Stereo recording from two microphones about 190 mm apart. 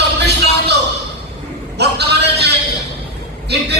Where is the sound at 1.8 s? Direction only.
60° right (ahead or behind).